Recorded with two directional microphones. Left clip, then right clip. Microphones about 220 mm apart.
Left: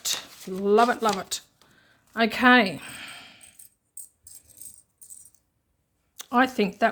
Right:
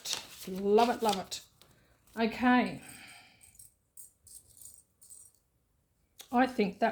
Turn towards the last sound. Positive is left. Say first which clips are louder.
# left 7 dB
turn(degrees=30)  # may be behind; listen again after turning